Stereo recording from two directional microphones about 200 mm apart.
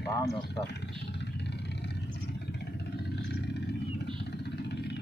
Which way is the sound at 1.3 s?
55° left (ahead or behind).